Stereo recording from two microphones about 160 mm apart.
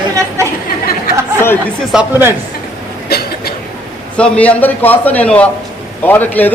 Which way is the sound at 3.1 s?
75° left (ahead or behind).